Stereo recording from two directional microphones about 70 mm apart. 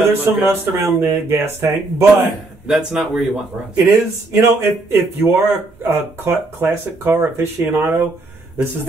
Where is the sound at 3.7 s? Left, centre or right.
Right.